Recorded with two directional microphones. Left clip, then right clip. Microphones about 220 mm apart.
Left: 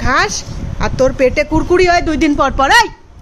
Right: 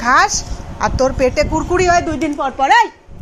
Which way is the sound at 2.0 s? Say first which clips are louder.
Left 5 dB; 35° left (ahead or behind).